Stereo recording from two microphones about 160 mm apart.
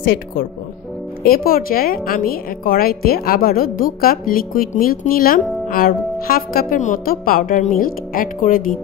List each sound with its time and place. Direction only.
0.0 s a woman's voice: 70° left (ahead or behind)